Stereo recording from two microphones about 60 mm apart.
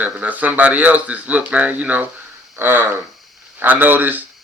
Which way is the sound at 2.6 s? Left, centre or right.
Right.